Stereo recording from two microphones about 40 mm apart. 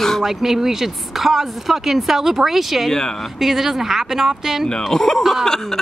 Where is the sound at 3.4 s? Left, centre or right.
Centre.